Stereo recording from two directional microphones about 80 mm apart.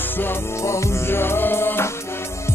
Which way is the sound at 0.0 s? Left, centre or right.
Left.